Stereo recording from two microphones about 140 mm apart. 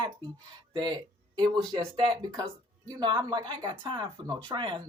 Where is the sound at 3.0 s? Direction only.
35° right (ahead or behind).